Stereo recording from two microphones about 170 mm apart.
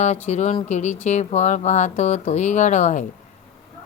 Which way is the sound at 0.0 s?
40° left (ahead or behind).